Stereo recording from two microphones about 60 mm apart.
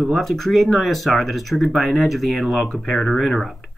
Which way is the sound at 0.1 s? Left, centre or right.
Centre.